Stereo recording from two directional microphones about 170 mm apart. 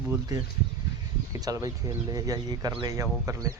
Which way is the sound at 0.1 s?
20° right (ahead or behind).